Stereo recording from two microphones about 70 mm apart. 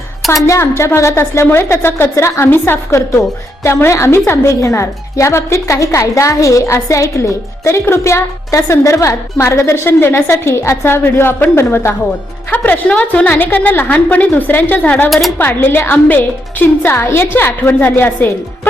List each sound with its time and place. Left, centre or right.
0.4 s a woman's voice: left